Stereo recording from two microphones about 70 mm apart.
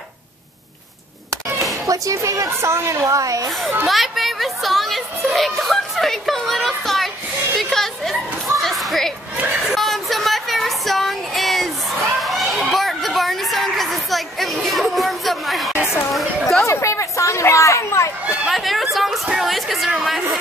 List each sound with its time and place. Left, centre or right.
1.9 s speech: right
3.8 s music: centre
7.5 s children playing: centre
9.8 s a sound: centre
16.6 s a sound: left
18.5 s chatter: centre
19.2 s a woman's voice: centre